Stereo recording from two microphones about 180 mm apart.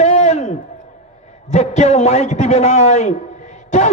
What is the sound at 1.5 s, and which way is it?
A man's voice, 40° left (ahead or behind).